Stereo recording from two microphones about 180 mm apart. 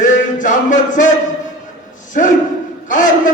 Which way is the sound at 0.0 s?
45° left (ahead or behind).